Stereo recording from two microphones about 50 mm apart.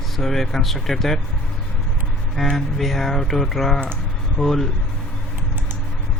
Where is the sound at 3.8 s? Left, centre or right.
Centre.